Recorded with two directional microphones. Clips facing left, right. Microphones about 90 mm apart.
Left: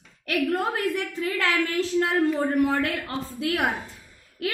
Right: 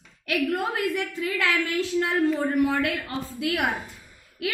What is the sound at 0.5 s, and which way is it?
A woman's voice, 35° left (ahead or behind).